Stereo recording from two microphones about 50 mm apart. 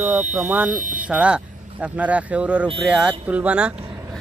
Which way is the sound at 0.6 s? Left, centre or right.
Right.